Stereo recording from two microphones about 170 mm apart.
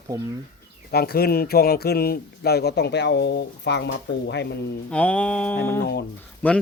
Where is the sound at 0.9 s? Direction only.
65° left (ahead or behind); by 4.4 s 90° left.